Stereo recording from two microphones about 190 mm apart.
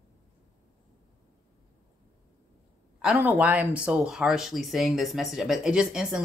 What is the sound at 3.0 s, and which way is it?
Speech, 5° right (ahead or behind).